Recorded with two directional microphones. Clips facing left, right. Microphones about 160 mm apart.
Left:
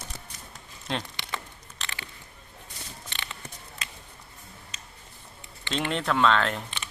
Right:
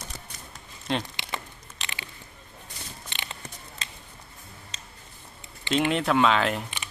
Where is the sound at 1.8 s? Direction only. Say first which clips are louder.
Even; 15° right (ahead or behind).